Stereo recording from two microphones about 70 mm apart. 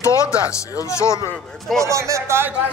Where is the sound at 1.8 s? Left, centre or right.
Right.